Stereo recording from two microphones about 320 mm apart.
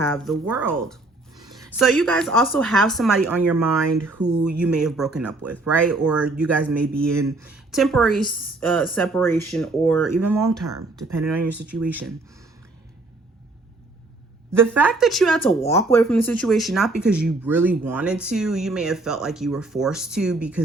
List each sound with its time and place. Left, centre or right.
0.0 s speech: centre
14.5 s speech: centre